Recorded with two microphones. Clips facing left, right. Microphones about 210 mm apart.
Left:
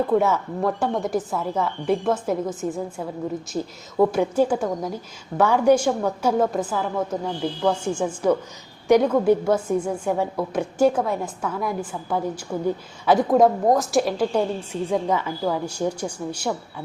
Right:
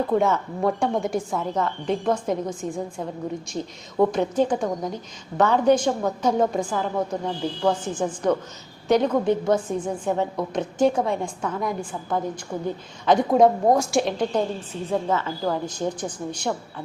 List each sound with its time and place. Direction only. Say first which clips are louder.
0.1 s a woman's voice: left 1 dB; 5° left (ahead or behind)